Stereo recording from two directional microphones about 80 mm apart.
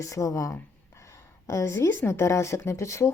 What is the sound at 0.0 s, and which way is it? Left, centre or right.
A woman's voice, left.